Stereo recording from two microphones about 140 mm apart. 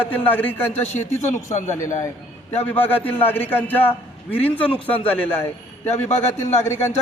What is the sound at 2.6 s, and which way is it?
A man's voice, 15° left (ahead or behind).